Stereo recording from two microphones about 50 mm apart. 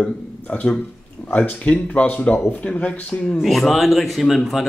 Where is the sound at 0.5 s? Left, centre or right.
Left.